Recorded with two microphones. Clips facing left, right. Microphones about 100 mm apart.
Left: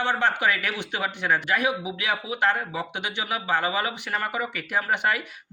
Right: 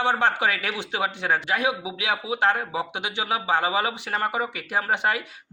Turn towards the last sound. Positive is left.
turn(degrees=-25)  # may be behind; listen again after turning